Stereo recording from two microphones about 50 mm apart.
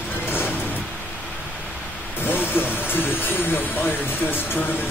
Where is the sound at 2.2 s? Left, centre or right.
Left.